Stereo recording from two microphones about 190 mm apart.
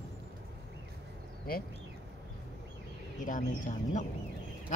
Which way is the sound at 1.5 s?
50° left (ahead or behind).